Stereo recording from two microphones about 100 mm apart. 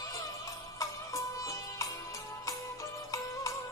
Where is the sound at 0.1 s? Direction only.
35° left (ahead or behind).